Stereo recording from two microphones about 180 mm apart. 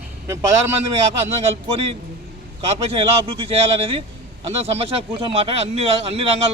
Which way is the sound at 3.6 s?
30° right (ahead or behind).